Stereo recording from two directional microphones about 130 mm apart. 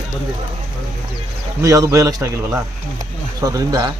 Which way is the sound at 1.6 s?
25° right (ahead or behind).